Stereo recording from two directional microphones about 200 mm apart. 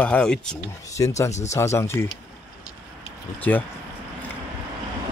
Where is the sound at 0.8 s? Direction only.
15° left (ahead or behind).